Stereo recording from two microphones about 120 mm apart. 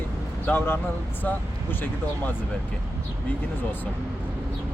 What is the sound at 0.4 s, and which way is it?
Speech, 15° left (ahead or behind).